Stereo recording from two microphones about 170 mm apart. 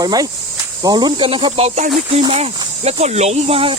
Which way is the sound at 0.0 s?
20° right (ahead or behind).